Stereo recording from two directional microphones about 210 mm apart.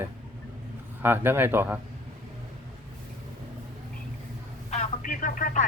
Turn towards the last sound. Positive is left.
turn(degrees=40)  # may be behind; listen again after turning